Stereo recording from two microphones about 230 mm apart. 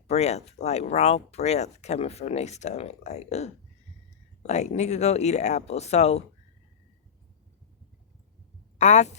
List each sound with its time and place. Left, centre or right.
0.1 s speech: left
8.8 s a woman's voice: left